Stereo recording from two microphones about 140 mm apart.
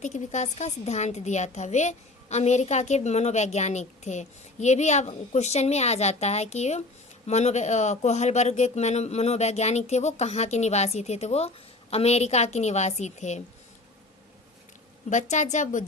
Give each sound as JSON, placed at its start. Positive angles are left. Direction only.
{"t": 0.0, "sound": "a woman's voice", "side_deg": 55}
{"t": 15.1, "sound": "a woman's voice", "side_deg": 60}